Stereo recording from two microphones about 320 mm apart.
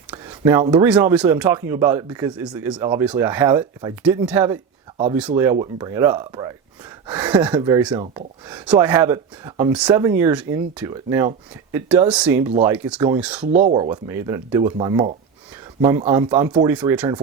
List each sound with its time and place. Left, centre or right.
0.1 s speech: centre
13.5 s speech: right; by 17.2 s centre